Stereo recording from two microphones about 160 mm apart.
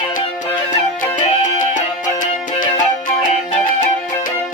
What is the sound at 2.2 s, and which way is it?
Music, 55° left (ahead or behind).